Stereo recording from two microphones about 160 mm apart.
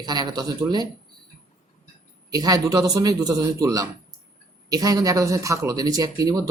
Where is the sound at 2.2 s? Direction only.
25° right (ahead or behind).